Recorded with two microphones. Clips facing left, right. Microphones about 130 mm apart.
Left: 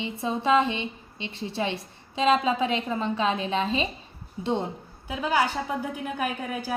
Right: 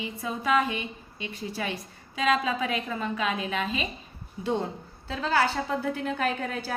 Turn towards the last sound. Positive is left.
turn(degrees=10)  # may be behind; listen again after turning